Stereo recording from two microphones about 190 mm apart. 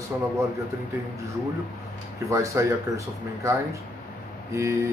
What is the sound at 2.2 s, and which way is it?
Speech, 15° right (ahead or behind).